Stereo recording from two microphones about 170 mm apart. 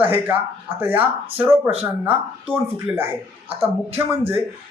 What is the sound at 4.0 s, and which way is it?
Speech, 15° right (ahead or behind).